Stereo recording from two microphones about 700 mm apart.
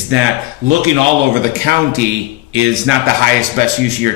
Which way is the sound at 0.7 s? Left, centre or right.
Centre.